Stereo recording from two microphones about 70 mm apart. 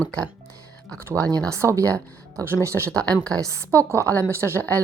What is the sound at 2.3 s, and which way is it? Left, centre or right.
Speech, right.